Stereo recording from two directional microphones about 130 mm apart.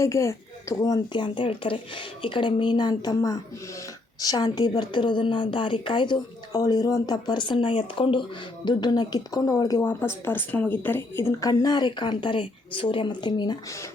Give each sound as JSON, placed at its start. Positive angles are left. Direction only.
{"t": 0.0, "sound": "speech", "side_deg": 20}
{"t": 1.1, "sound": "a woman's voice", "side_deg": 40}
{"t": 9.8, "sound": "a woman's voice", "side_deg": 15}